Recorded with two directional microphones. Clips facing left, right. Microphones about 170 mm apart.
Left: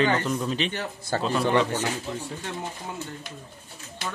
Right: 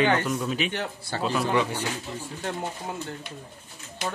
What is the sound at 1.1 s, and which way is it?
Speech, 45° left (ahead or behind).